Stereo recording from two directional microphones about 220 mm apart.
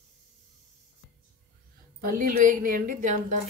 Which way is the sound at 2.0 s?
40° right (ahead or behind).